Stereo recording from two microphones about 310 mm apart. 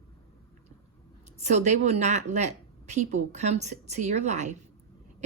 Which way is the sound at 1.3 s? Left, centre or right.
Right.